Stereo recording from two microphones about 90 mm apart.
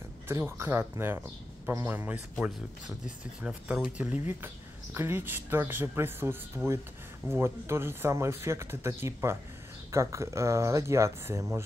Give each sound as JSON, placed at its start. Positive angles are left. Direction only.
{"t": 0.3, "sound": "speech", "side_deg": -30}
{"t": 3.4, "sound": "speech", "side_deg": -10}
{"t": 4.9, "sound": "speech", "side_deg": -25}